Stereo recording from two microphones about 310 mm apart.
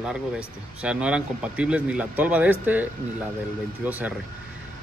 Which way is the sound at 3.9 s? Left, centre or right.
Centre.